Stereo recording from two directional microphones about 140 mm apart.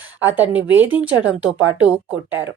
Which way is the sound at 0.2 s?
15° right (ahead or behind).